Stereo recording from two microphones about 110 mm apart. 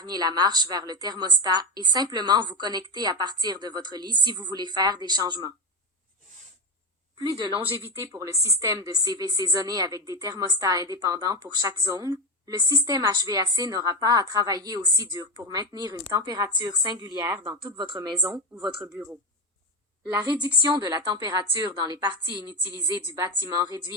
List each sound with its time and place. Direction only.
0.0 s a woman's voice: 40° right (ahead or behind)
7.2 s a woman's voice: 45° right (ahead or behind)
7.6 s a woman's voice: 20° right (ahead or behind); by 17.1 s 40° right (ahead or behind)
17.2 s a woman's voice: 25° right (ahead or behind)
17.6 s a woman's voice: 40° right (ahead or behind)
20.4 s a woman's voice: 45° right (ahead or behind)
23.1 s a woman's voice: 30° right (ahead or behind)